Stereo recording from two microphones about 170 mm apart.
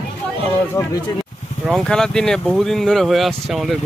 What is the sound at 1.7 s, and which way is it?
Speech, centre (ahead or behind).